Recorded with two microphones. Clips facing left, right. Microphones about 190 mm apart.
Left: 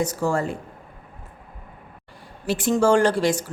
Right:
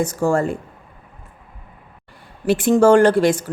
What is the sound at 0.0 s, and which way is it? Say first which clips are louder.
Speech: right 5 dB; 50° right (ahead or behind).